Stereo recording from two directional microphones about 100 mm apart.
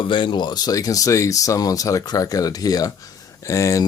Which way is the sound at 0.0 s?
55° left (ahead or behind).